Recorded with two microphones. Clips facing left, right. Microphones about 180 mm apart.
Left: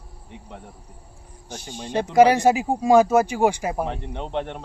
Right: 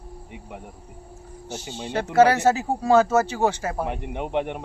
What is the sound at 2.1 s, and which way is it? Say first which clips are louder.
A man's voice: left 2 dB; 15° left (ahead or behind).